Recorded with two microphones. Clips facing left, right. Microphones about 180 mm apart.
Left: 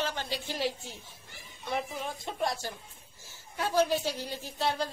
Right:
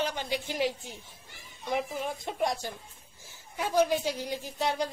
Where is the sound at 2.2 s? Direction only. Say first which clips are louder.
Right 1 dB; 20° right (ahead or behind).